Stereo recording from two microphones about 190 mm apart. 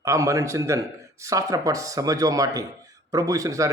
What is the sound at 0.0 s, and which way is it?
A man's voice, 15° right (ahead or behind).